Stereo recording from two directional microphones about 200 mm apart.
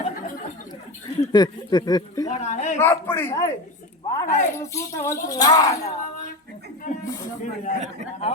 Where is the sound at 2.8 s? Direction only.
10° left (ahead or behind).